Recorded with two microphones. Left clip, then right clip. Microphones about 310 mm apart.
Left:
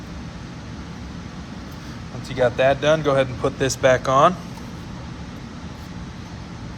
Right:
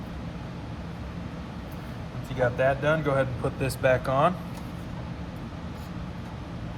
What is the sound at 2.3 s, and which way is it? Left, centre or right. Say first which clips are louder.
Speech: left 7 dB; left.